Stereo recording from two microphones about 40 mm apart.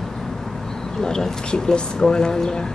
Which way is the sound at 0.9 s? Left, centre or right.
Centre.